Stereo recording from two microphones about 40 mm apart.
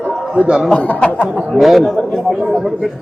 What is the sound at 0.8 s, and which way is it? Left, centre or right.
Speech, left.